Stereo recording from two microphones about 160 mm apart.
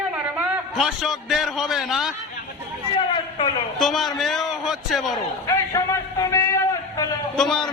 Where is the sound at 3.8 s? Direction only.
Centre (ahead or behind).